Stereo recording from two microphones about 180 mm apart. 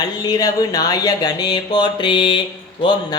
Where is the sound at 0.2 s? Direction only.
20° left (ahead or behind).